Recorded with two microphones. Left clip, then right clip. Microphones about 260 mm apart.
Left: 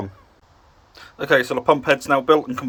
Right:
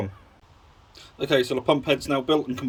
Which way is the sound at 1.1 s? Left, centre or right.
Centre.